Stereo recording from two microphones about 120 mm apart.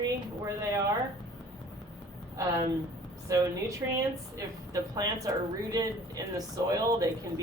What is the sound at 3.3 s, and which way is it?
Speech, 25° right (ahead or behind).